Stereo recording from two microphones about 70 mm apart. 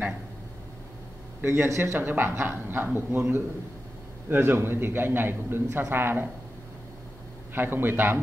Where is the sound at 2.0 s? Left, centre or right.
Right.